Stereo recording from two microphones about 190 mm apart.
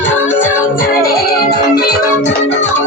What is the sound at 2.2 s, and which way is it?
Music, 35° left (ahead or behind).